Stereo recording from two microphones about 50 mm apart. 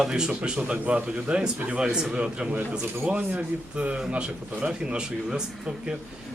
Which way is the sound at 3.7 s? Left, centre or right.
Right.